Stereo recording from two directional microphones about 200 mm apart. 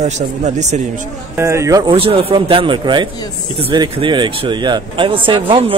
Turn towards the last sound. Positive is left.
turn(degrees=-25)  # may be behind; listen again after turning